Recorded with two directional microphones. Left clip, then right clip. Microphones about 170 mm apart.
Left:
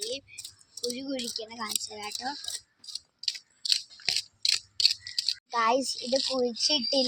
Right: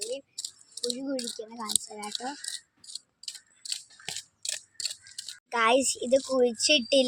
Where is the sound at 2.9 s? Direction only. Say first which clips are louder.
Left 8 dB; 40° left (ahead or behind).